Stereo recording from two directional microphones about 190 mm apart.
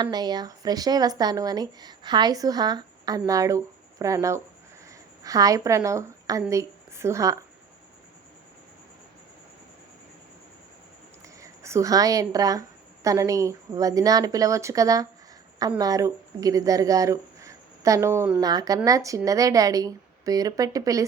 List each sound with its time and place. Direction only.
0.0 s a woman's voice: 20° right (ahead or behind)
11.3 s a woman's voice: 15° right (ahead or behind)